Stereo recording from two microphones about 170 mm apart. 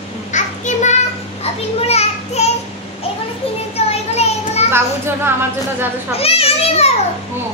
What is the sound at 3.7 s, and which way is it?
Children playing, 40° left (ahead or behind).